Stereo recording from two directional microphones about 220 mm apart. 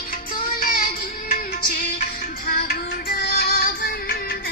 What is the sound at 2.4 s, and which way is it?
Music, 45° left (ahead or behind).